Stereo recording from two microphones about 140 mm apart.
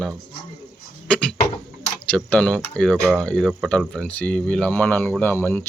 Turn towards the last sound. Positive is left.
turn(degrees=15)  # may be behind; listen again after turning